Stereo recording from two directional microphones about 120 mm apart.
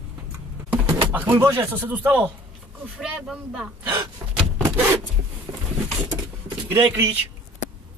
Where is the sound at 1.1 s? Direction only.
15° right (ahead or behind).